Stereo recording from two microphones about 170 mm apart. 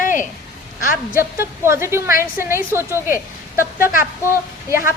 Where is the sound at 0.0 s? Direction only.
50° left (ahead or behind).